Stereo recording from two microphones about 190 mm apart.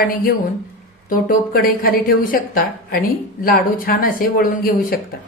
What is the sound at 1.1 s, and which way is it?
A woman's voice, 50° left (ahead or behind).